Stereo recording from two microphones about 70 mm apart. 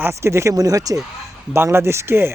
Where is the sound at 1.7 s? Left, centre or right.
Right.